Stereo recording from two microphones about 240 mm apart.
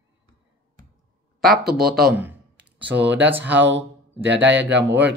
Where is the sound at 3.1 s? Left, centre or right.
Centre.